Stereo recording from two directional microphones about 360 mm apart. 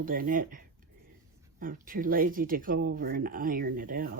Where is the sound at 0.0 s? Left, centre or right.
Right.